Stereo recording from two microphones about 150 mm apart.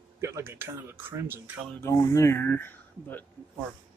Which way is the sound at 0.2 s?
15° right (ahead or behind).